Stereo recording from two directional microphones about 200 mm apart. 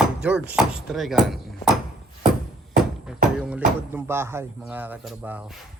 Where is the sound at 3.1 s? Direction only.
5° right (ahead or behind).